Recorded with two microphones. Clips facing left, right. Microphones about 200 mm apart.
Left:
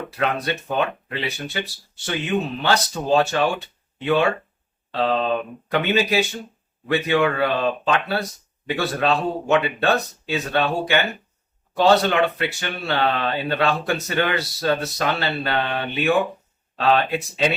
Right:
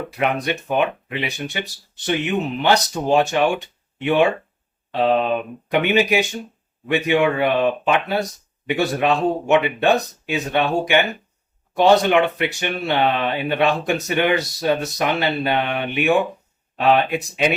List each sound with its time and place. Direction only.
0.1 s speech: 15° right (ahead or behind)